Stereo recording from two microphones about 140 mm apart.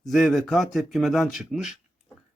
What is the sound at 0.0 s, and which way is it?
Speech, centre (ahead or behind).